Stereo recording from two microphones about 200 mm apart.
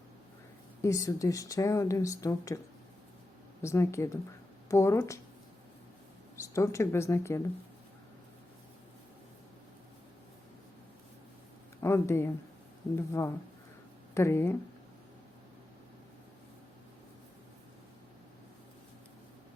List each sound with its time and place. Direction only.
0.8 s speech: 15° left (ahead or behind)
3.6 s speech: 15° left (ahead or behind)
6.3 s speech: 15° left (ahead or behind)
11.8 s speech: 15° left (ahead or behind)